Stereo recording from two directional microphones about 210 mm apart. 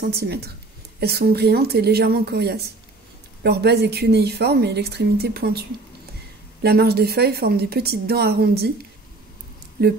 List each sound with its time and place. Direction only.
0.0 s a woman's voice: 50° right (ahead or behind)